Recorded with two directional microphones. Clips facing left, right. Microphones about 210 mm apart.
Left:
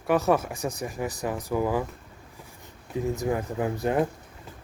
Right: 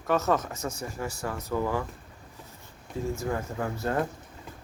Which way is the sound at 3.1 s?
15° left (ahead or behind).